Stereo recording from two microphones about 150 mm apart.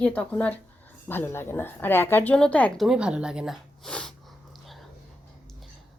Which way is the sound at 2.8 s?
5° right (ahead or behind).